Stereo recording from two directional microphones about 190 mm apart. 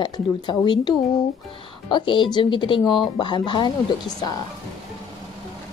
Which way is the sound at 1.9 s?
25° left (ahead or behind).